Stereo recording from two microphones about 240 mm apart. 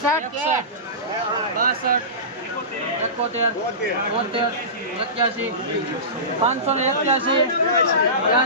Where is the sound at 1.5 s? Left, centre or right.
Right.